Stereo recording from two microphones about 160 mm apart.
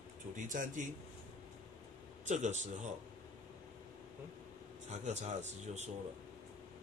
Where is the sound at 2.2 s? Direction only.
45° right (ahead or behind).